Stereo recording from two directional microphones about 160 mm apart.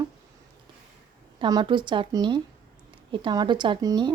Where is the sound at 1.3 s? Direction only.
30° right (ahead or behind).